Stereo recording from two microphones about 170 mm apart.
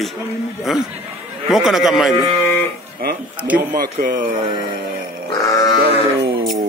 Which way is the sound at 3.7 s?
55° right (ahead or behind).